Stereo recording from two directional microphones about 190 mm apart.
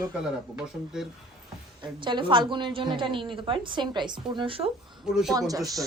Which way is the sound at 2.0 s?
25° right (ahead or behind).